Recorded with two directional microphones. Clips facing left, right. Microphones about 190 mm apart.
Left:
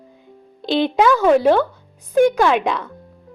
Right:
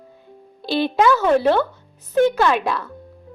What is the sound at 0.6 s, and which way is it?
A woman's voice, 20° left (ahead or behind).